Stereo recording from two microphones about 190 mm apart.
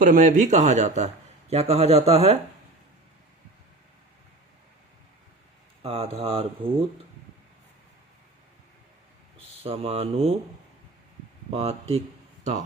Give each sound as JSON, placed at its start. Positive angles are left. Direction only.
{"t": 0.0, "sound": "speech", "side_deg": -45}
{"t": 5.8, "sound": "speech", "side_deg": -30}
{"t": 9.6, "sound": "speech", "side_deg": -30}
{"t": 11.5, "sound": "speech", "side_deg": -30}